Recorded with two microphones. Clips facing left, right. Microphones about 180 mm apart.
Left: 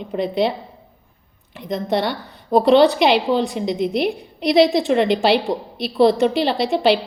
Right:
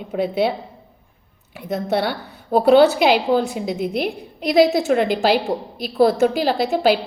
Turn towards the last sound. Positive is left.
turn(degrees=0)  # may be behind; listen again after turning